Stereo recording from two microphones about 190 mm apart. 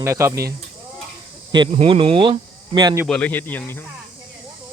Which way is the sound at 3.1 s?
10° left (ahead or behind).